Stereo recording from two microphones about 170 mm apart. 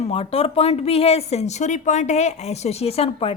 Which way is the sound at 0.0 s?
35° left (ahead or behind).